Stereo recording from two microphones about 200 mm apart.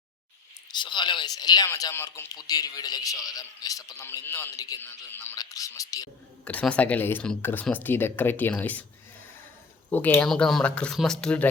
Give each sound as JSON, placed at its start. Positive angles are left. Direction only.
{"t": 0.7, "sound": "speech", "side_deg": 20}
{"t": 6.4, "sound": "speech", "side_deg": 5}
{"t": 9.9, "sound": "speech", "side_deg": 10}